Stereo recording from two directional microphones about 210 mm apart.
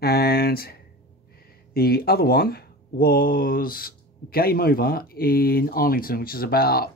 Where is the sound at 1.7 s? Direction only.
45° left (ahead or behind).